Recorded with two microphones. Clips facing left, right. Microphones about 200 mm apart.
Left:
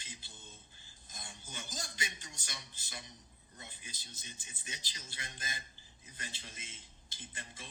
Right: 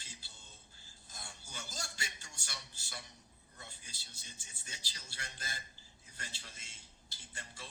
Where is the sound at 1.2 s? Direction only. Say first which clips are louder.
Left 1 dB; 20° left (ahead or behind).